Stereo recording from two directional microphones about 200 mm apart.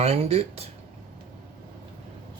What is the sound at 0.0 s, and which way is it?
Speech, 30° right (ahead or behind).